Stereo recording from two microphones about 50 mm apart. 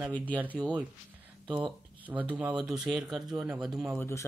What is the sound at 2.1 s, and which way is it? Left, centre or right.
Speech, right.